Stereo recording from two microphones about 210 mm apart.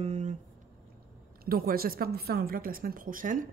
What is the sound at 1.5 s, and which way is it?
Speech, 45° right (ahead or behind).